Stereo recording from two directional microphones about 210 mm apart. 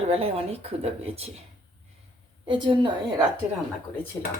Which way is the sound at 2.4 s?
20° right (ahead or behind).